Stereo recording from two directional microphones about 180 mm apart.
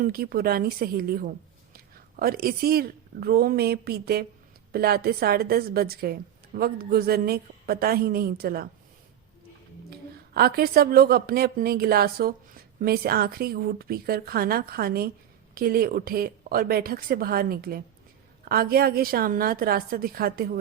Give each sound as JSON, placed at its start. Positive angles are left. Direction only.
{"t": 0.0, "sound": "a woman's voice", "side_deg": -55}
{"t": 9.9, "sound": "a woman's voice", "side_deg": -60}